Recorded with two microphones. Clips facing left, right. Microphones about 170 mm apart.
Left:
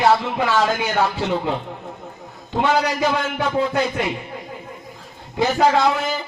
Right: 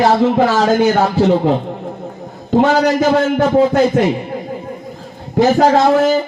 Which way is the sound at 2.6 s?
45° right (ahead or behind).